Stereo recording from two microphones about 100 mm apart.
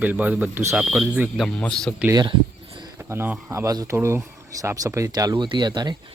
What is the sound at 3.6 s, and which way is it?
Speech, 35° right (ahead or behind).